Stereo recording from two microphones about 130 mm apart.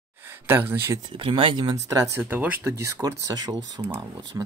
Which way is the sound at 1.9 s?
25° right (ahead or behind).